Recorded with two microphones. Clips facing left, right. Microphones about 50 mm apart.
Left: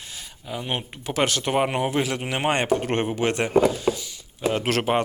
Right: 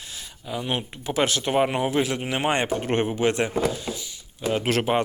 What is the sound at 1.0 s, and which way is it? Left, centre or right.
Speech, left.